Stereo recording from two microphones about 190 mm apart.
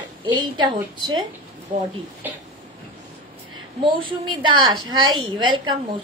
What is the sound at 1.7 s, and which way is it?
Speech, 40° right (ahead or behind).